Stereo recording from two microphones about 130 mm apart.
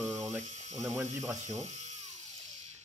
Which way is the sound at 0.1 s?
Centre (ahead or behind).